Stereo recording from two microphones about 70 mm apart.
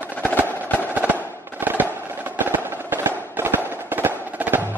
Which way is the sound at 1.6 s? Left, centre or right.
Right.